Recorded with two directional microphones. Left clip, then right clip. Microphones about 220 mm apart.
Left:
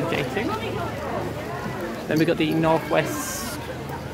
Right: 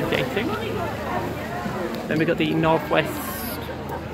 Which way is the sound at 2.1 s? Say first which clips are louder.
Left 1 dB; 25° left (ahead or behind).